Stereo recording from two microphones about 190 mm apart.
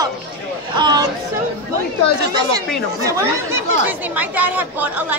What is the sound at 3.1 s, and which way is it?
Speech, 15° right (ahead or behind).